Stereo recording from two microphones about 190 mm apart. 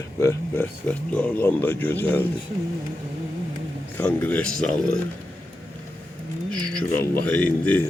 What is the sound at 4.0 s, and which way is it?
Speech, 10° left (ahead or behind).